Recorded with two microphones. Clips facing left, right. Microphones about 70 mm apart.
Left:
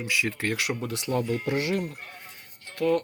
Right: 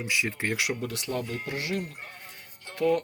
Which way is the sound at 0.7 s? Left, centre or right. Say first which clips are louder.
Left 1 dB; centre.